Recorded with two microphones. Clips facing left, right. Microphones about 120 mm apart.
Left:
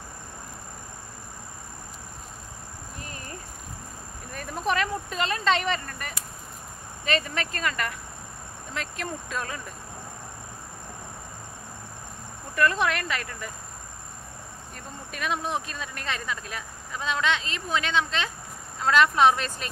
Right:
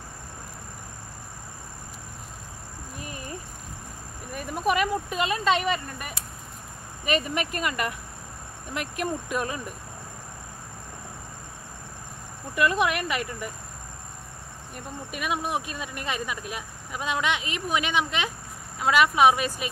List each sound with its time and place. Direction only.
4.3 s speech: 10° right (ahead or behind)
12.5 s speech: 15° right (ahead or behind)
15.0 s speech: 10° right (ahead or behind)